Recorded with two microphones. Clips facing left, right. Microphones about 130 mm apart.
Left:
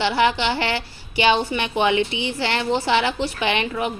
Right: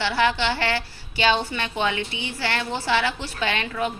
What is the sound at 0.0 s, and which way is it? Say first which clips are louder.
A woman's voice: left 3 dB; 15° left (ahead or behind).